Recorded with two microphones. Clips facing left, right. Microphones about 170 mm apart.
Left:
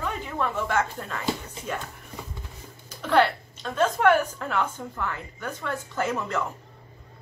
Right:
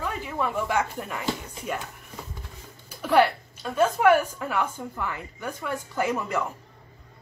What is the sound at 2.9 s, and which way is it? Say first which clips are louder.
Speech: right 1 dB; 10° right (ahead or behind).